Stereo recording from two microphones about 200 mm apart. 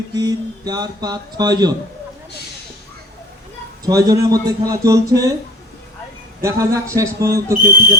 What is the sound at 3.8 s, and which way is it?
Speech, 20° right (ahead or behind).